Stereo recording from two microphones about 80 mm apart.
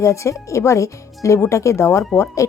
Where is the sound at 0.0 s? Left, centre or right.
Left.